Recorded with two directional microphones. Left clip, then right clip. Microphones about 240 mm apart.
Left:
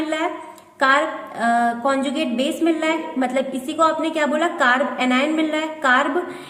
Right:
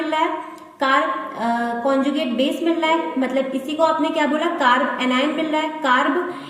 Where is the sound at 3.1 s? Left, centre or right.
Left.